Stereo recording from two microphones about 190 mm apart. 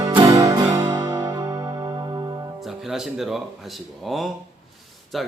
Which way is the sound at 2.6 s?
Centre (ahead or behind).